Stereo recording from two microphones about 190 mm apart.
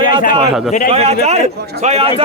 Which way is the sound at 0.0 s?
45° left (ahead or behind).